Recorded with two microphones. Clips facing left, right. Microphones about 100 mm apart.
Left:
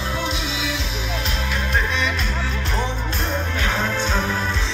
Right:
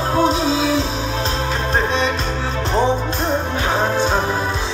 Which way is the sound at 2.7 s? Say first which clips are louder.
Right 11 dB; 30° right (ahead or behind).